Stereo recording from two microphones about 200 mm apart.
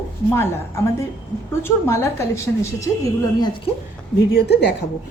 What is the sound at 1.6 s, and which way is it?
A woman's voice, 15° left (ahead or behind).